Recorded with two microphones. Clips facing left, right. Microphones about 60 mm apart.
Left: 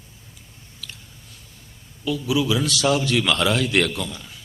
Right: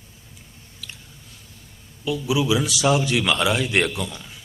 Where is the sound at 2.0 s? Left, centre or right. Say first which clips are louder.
Even; centre.